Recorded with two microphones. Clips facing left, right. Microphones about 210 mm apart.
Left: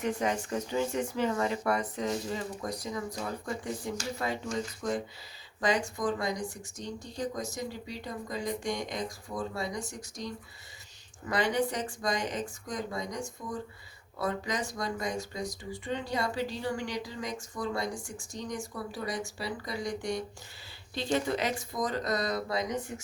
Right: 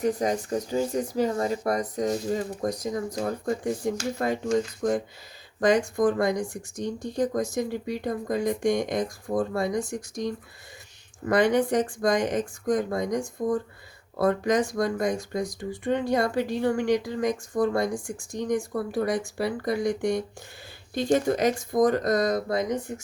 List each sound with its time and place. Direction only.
0.0 s speech: 35° right (ahead or behind)
3.9 s speech: 55° right (ahead or behind)